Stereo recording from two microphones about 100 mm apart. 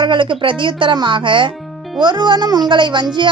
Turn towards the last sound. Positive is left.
turn(degrees=-55)  # may be behind; listen again after turning